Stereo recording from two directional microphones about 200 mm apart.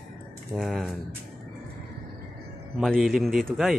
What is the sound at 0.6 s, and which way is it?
Speech, centre (ahead or behind).